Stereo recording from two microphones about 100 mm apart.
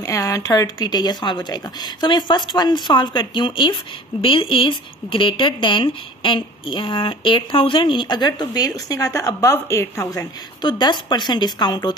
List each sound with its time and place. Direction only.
0.0 s speech: 35° left (ahead or behind)
10.6 s speech: 45° left (ahead or behind)